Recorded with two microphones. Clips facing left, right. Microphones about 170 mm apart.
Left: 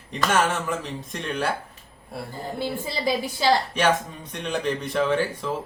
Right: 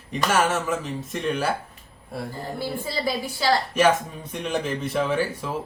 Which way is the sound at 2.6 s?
20° left (ahead or behind).